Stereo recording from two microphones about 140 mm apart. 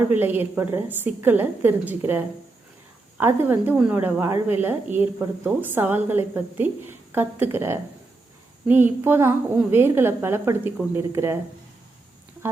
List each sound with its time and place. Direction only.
0.1 s a woman's voice: 15° right (ahead or behind)